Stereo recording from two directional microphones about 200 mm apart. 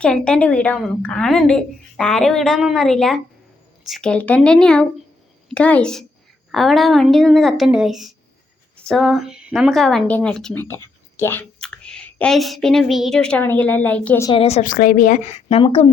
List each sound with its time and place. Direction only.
0.0 s a woman's voice: 5° left (ahead or behind)
14.3 s speech: 30° left (ahead or behind)